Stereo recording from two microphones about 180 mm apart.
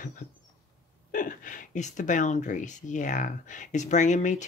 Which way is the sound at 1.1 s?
45° left (ahead or behind).